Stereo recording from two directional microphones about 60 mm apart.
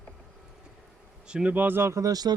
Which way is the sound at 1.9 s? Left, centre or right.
Right.